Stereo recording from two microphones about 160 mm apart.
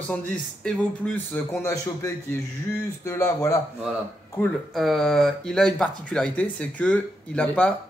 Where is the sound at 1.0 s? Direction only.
10° left (ahead or behind).